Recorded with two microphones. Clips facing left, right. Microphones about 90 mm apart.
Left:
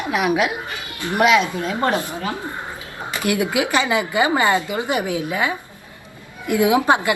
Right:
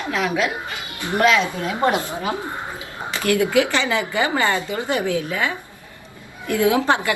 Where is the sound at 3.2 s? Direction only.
20° left (ahead or behind).